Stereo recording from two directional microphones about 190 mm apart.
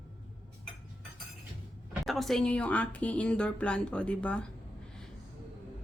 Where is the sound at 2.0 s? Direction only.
Centre (ahead or behind).